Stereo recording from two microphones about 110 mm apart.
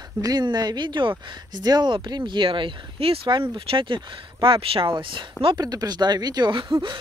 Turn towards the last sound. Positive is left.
turn(degrees=-45)  # may be behind; listen again after turning